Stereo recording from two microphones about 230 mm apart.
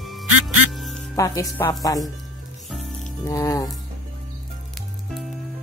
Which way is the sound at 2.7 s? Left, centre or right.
Centre.